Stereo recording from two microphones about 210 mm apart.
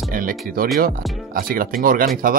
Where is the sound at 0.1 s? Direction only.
40° right (ahead or behind).